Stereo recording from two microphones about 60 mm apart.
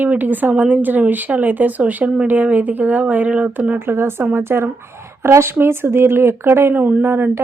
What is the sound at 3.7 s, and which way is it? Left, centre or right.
A woman's voice, right.